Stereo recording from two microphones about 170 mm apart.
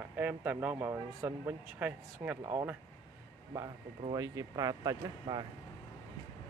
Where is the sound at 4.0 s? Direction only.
25° right (ahead or behind).